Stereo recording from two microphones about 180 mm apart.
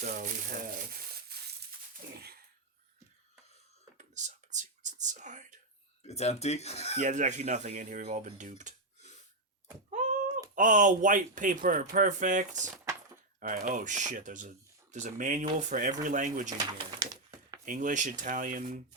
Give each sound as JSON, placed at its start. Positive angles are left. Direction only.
{"t": 0.0, "sound": "speech", "side_deg": -45}
{"t": 3.9, "sound": "whispering", "side_deg": -45}
{"t": 6.0, "sound": "speech", "side_deg": 35}
{"t": 7.0, "sound": "speech", "side_deg": -45}
{"t": 9.9, "sound": "a sound", "side_deg": -45}
{"t": 10.5, "sound": "speech", "side_deg": -45}
{"t": 17.7, "sound": "speech", "side_deg": -45}